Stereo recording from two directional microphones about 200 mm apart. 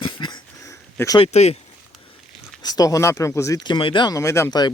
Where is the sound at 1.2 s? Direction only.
30° left (ahead or behind).